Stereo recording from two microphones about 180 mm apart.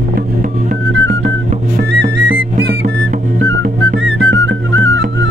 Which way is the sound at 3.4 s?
85° right.